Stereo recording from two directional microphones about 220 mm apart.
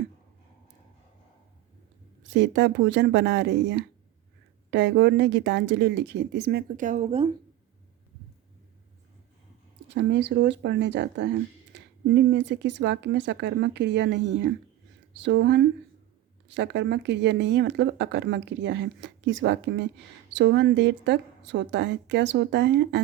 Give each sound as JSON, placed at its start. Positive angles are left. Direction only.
{"t": 2.2, "sound": "speech", "side_deg": -55}
{"t": 9.9, "sound": "speech", "side_deg": -50}